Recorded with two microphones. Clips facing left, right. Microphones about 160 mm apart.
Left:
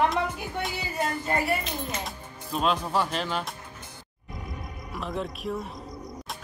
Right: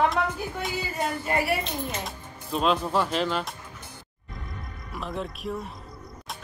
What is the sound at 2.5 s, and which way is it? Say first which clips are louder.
Speech: right 2 dB; centre (ahead or behind).